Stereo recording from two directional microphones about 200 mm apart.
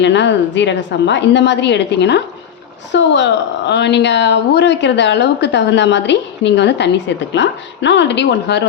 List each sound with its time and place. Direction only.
0.0 s a woman's voice: 65° left (ahead or behind)